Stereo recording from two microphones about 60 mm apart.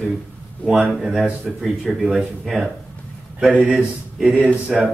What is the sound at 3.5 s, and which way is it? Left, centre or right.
Speech, centre.